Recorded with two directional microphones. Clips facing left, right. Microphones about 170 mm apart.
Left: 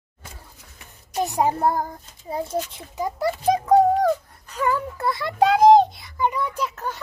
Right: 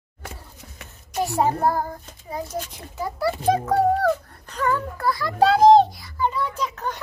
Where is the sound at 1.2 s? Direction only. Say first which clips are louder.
Even; 15° left (ahead or behind).